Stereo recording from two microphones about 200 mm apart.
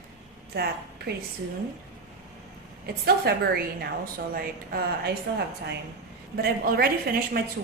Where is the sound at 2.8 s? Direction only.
50° right (ahead or behind).